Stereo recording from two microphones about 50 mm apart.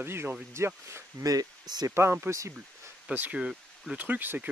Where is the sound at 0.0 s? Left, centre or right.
Right.